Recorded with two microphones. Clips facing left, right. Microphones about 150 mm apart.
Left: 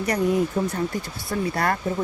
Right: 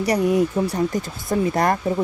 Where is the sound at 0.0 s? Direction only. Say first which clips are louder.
Right 3 dB; 10° right (ahead or behind).